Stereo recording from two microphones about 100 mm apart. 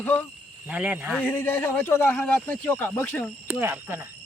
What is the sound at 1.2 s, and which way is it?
Speech, 20° left (ahead or behind).